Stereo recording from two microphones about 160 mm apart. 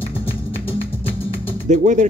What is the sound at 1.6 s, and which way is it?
Speech, 50° right (ahead or behind).